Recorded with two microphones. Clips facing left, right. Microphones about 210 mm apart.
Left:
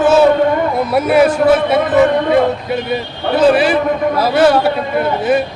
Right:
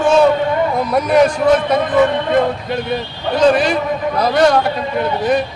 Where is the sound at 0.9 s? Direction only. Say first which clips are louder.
Left 2 dB; 5° left (ahead or behind).